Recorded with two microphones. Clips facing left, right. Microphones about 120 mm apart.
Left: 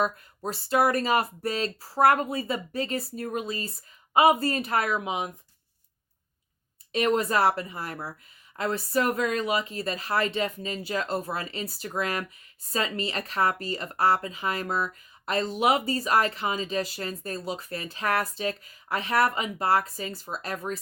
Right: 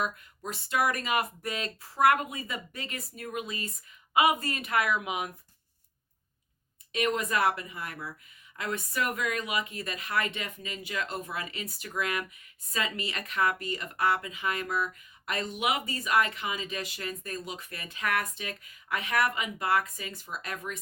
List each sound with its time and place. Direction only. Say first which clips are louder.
0.0 s speech: left 6 dB; 35° left (ahead or behind)
6.9 s speech: left 5 dB; 35° left (ahead or behind)